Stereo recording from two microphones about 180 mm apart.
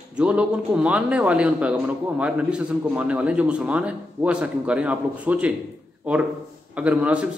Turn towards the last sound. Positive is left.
turn(degrees=-10)  # may be behind; listen again after turning